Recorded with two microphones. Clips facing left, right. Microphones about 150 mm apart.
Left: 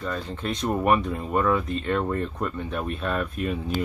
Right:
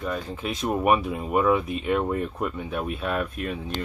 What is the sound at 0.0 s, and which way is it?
Speech, 10° right (ahead or behind).